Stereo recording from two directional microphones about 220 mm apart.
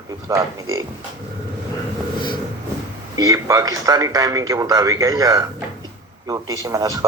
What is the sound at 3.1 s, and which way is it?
A man's voice, 15° right (ahead or behind).